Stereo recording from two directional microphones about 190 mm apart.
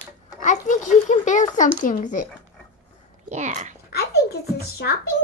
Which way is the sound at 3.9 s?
55° left (ahead or behind).